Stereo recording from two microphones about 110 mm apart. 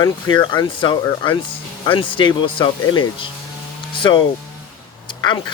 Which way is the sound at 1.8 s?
50° left (ahead or behind).